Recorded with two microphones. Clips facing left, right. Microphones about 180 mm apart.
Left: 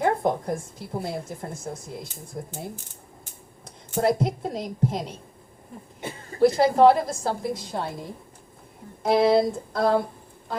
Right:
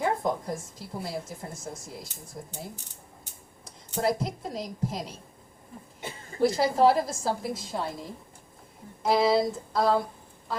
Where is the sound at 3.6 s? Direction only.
55° left (ahead or behind).